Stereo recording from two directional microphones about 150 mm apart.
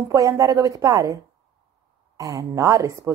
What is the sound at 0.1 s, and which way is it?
A woman's voice, 20° right (ahead or behind).